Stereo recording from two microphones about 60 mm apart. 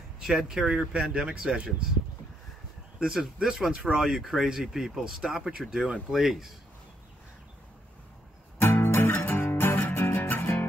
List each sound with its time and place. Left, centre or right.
0.2 s speech: centre
3.0 s speech: centre
8.5 s music: left